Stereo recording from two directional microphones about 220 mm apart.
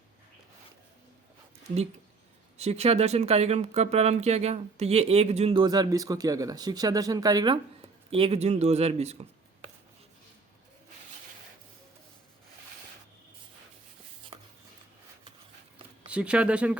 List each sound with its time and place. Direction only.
2.6 s speech: 30° right (ahead or behind)
14.3 s a sound: 25° right (ahead or behind)
16.0 s speech: 5° right (ahead or behind)